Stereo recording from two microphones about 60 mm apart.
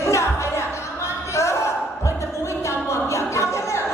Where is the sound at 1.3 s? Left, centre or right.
Left.